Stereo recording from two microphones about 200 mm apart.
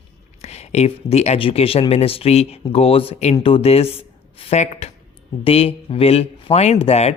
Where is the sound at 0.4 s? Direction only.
30° left (ahead or behind).